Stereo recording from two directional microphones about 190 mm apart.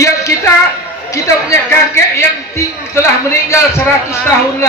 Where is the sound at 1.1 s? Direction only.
15° left (ahead or behind).